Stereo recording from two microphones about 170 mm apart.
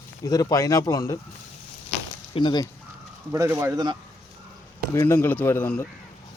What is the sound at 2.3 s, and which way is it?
Speech, 25° left (ahead or behind).